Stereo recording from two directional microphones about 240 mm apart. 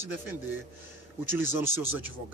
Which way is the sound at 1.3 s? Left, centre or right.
Centre.